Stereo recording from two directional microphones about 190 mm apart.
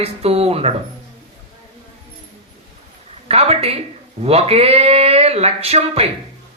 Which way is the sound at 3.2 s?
35° right (ahead or behind).